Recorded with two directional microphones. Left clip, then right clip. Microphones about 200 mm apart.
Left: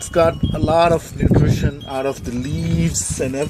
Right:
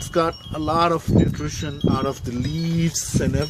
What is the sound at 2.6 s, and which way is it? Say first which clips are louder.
Speech: left 3 dB; 30° right (ahead or behind).